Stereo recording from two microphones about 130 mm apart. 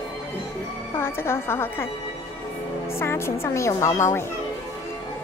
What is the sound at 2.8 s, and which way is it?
Speech, 20° left (ahead or behind).